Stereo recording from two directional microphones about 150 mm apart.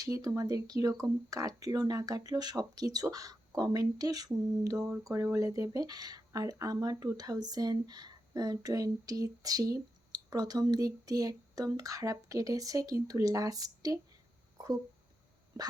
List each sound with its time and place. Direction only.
0.0 s speech: 20° right (ahead or behind)